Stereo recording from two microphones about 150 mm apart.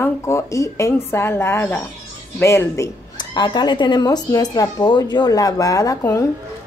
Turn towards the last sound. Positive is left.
turn(degrees=20)  # may be behind; listen again after turning